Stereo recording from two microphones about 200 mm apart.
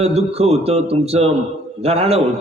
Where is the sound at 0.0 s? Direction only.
30° right (ahead or behind).